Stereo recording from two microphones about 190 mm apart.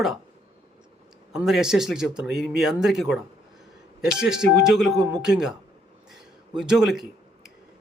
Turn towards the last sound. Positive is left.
turn(degrees=0)  # may be behind; listen again after turning